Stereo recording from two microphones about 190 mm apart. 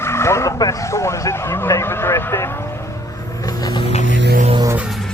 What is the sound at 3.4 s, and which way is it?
Vehicle, 20° left (ahead or behind).